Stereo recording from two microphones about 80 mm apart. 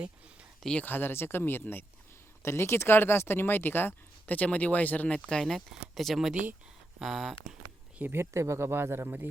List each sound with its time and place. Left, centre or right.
0.6 s speech: centre
0.9 s speech: left; by 6.3 s centre
6.3 s speech: centre
7.0 s speech: centre
7.9 s speech: right